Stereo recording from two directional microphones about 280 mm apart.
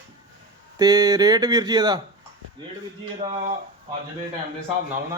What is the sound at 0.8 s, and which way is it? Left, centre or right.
Speech, centre.